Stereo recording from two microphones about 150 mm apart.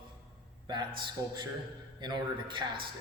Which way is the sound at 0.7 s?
30° right (ahead or behind).